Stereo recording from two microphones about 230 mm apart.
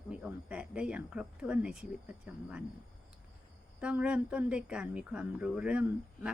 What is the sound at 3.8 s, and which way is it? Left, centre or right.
A woman's voice, centre.